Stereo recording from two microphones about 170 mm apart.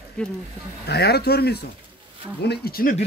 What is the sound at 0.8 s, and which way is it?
Speech, 75° left (ahead or behind).